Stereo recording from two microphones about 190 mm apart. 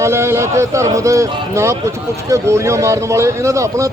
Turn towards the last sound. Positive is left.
turn(degrees=-15)  # may be behind; listen again after turning